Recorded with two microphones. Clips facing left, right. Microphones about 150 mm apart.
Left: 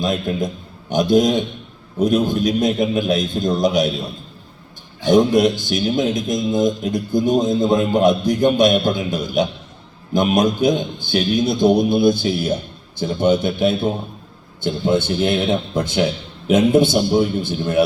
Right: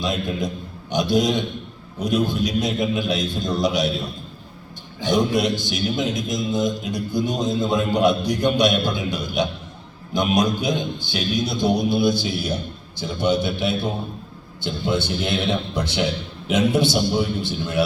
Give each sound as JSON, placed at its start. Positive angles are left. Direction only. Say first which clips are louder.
{"t": 0.0, "sound": "a man's voice", "louder": "left 4 dB", "side_deg": 50}
{"t": 5.1, "sound": "a man's voice", "louder": "left 6 dB", "side_deg": 50}